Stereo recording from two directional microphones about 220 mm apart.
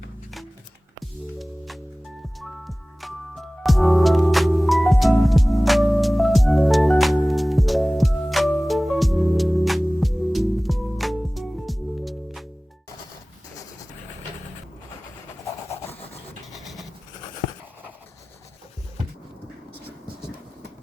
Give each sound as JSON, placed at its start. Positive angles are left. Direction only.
{"t": 1.4, "sound": "music", "side_deg": 0}
{"t": 15.7, "sound": "rub", "side_deg": 25}
{"t": 16.5, "sound": "vehicle", "side_deg": 0}